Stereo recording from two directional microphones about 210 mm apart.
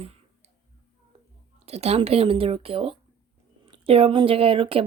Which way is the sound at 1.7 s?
30° right (ahead or behind).